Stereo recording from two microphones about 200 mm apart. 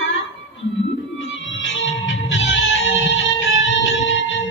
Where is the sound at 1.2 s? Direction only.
70° left (ahead or behind).